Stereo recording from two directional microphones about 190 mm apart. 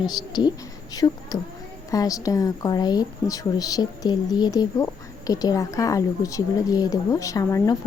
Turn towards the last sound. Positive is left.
turn(degrees=15)  # may be behind; listen again after turning